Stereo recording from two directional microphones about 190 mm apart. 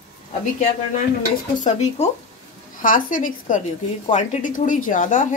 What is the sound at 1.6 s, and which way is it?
Speech, 35° left (ahead or behind).